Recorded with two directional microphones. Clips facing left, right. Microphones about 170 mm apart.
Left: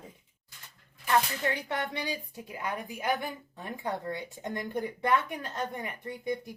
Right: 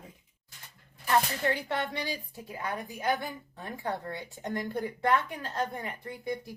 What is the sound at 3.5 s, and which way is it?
Speech, 20° left (ahead or behind).